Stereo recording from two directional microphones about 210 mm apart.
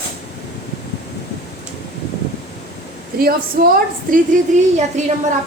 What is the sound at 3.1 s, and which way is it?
Speech, 45° right (ahead or behind).